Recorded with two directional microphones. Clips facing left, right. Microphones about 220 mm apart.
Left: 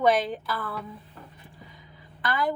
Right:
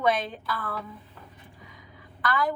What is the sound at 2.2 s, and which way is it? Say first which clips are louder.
Speech: even; 20° left (ahead or behind).